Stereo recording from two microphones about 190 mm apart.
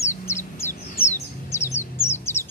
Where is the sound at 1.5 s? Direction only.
15° left (ahead or behind).